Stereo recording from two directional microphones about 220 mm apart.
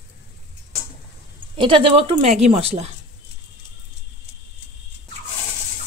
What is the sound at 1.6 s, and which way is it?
A woman's voice, 25° right (ahead or behind).